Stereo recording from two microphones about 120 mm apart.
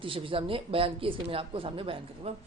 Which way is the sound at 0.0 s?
45° right (ahead or behind).